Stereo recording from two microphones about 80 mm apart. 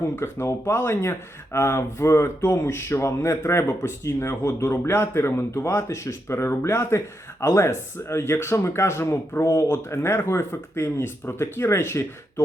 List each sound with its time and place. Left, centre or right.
0.2 s speech: left